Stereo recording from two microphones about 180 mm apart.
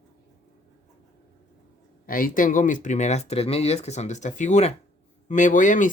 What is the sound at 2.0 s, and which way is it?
Speech, 50° left (ahead or behind).